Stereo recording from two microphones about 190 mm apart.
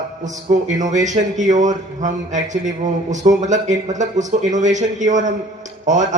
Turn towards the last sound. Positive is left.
turn(degrees=-40)  # may be behind; listen again after turning